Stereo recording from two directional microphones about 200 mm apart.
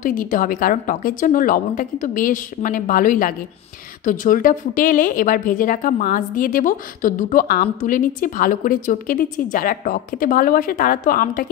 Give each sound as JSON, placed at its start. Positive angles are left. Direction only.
{"t": 0.0, "sound": "speech", "side_deg": 45}